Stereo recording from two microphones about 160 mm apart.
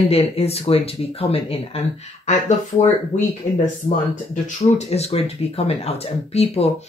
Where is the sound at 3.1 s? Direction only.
45° left (ahead or behind).